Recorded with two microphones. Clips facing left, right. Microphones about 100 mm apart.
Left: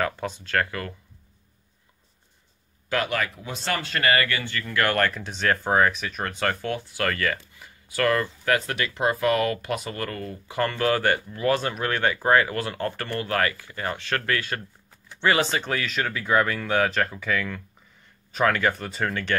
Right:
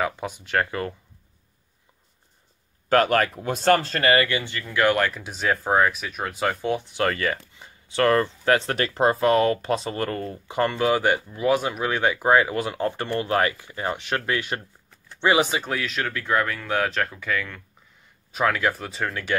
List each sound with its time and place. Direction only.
0.0 s speech: 15° right (ahead or behind)
2.9 s speech: 45° right (ahead or behind); by 6.6 s 5° right (ahead or behind)
6.6 s speech: 20° right (ahead or behind); by 19.3 s centre (ahead or behind)